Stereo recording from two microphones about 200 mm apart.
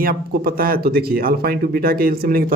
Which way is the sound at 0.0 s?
50° right (ahead or behind).